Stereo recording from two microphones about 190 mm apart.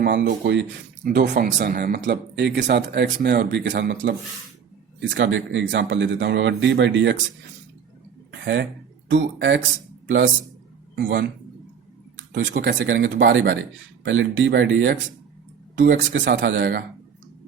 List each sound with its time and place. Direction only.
0.0 s speech: 65° right (ahead or behind)
1.0 s speech: 50° right (ahead or behind); by 7.2 s 70° right (ahead or behind)
8.3 s a sound: 70° right (ahead or behind)
9.0 s speech: 75° right (ahead or behind)
10.9 s speech: 75° right (ahead or behind)